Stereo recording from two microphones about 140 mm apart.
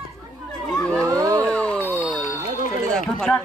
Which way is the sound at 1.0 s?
25° right (ahead or behind).